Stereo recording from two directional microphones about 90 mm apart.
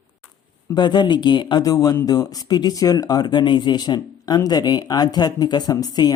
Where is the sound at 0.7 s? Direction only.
55° left (ahead or behind).